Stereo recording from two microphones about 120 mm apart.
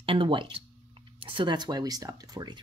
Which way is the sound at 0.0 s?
45° right (ahead or behind).